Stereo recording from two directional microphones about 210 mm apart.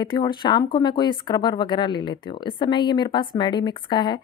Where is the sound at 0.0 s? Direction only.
20° left (ahead or behind).